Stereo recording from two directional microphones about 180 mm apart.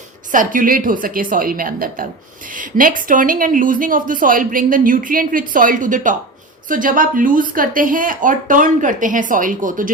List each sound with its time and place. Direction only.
0.3 s a woman's voice: 45° right (ahead or behind)